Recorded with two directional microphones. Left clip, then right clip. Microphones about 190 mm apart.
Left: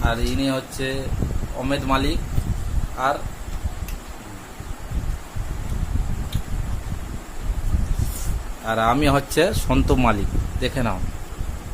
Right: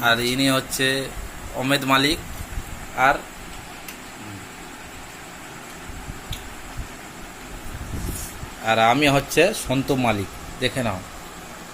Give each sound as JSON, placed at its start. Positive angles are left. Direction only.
{"t": 0.0, "sound": "speech", "side_deg": 0}
{"t": 8.6, "sound": "speech", "side_deg": 15}